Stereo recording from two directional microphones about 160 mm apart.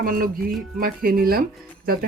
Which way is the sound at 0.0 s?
60° right (ahead or behind).